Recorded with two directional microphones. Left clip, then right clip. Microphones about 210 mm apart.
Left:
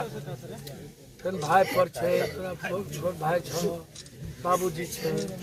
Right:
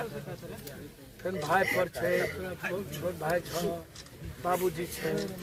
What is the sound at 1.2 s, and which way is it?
Speech, 10° right (ahead or behind).